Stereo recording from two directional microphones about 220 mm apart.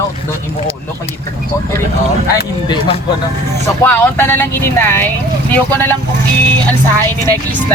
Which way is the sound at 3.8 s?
10° left (ahead or behind).